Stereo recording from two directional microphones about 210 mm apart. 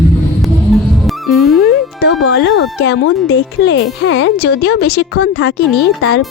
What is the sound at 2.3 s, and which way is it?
Speech, 60° left (ahead or behind).